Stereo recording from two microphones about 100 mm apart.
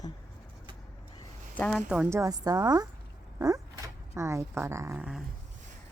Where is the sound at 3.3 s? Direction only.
35° right (ahead or behind).